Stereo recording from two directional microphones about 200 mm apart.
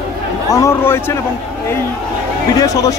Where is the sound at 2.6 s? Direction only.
15° left (ahead or behind).